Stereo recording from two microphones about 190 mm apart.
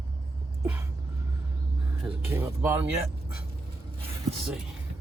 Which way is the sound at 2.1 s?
15° right (ahead or behind).